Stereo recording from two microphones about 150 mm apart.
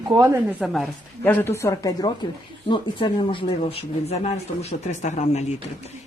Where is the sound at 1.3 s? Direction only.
15° left (ahead or behind).